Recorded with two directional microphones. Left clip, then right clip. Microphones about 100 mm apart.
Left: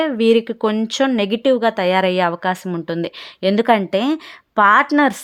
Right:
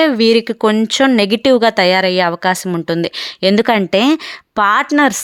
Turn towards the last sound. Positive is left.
turn(degrees=-20)  # may be behind; listen again after turning